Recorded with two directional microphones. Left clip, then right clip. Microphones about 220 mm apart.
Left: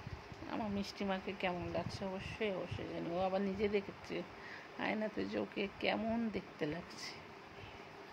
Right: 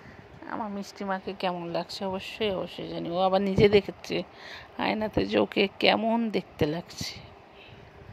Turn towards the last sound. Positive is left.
turn(degrees=-40)  # may be behind; listen again after turning